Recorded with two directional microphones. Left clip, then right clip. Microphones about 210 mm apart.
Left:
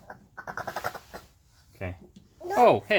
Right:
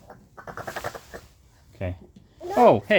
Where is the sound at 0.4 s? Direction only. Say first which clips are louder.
Even; 20° right (ahead or behind).